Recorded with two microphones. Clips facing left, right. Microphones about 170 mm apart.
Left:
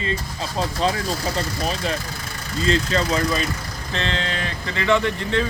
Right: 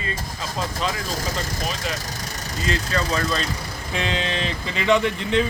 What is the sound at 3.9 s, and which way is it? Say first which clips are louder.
Speech: right 1 dB; 15° right (ahead or behind).